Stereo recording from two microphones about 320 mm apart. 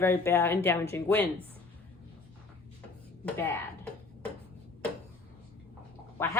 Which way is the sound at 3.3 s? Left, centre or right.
Centre.